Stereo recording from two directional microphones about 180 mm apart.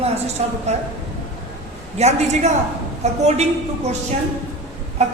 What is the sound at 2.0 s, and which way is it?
A woman's voice, 40° right (ahead or behind).